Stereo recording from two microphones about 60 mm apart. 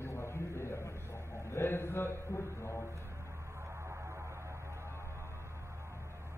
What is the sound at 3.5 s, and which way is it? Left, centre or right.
Music, right.